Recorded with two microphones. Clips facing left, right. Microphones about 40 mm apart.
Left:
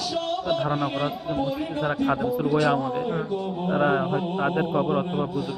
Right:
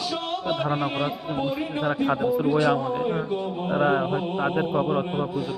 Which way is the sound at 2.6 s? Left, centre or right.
Centre.